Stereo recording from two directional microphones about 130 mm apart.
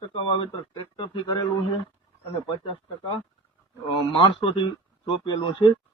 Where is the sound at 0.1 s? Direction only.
40° left (ahead or behind).